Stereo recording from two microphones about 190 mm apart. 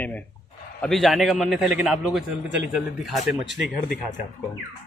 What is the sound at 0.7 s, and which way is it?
A man's voice, centre (ahead or behind).